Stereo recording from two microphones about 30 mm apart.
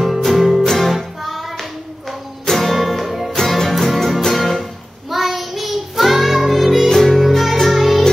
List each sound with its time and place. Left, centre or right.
0.0 s music: centre
0.7 s music: centre
1.2 s music: centre
2.4 s music: centre
3.7 s music: centre